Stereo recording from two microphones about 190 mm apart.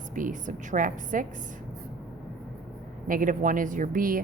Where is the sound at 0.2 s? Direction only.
45° right (ahead or behind).